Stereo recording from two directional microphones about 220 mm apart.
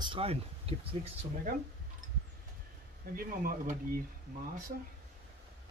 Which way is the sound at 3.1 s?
40° right (ahead or behind).